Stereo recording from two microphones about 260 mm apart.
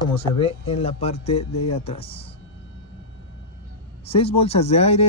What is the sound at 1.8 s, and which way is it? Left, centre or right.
Speech, left.